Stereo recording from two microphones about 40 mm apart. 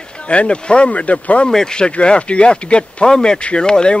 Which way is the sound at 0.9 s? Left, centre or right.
Left.